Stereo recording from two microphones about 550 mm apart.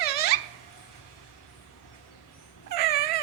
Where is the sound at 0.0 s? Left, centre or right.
Centre.